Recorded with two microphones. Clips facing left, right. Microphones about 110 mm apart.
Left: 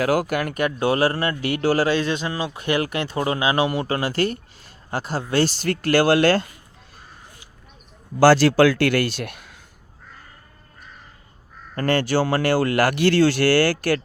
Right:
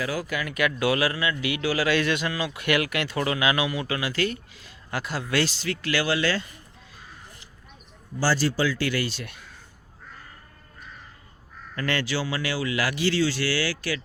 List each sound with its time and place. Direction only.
0.0 s speech: 55° left (ahead or behind)
0.8 s a man's voice: 30° left (ahead or behind)
5.6 s speech: 50° left (ahead or behind)
8.2 s speech: 70° left (ahead or behind)
11.7 s speech: 45° left (ahead or behind)